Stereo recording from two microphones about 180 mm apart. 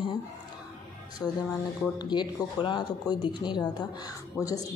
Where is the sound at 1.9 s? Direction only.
25° left (ahead or behind).